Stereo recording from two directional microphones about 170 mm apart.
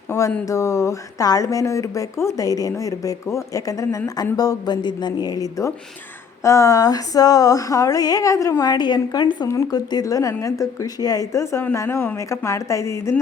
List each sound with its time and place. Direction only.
0.1 s speech: 15° left (ahead or behind)